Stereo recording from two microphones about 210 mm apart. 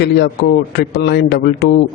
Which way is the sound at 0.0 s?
50° left (ahead or behind).